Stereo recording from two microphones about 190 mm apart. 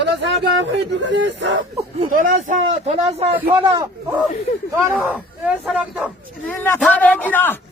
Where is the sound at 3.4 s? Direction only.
15° right (ahead or behind).